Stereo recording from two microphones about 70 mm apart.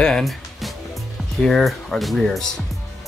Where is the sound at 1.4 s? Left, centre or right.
Centre.